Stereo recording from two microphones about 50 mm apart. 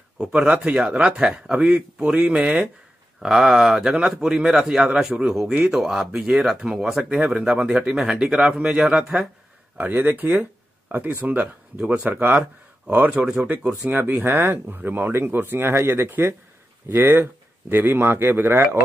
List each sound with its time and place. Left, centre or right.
0.2 s speech: right
3.2 s speech: centre
9.8 s speech: right
11.4 s speech: right
13.1 s speech: centre
13.4 s speech: right